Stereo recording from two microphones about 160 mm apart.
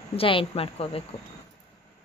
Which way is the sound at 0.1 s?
35° left (ahead or behind).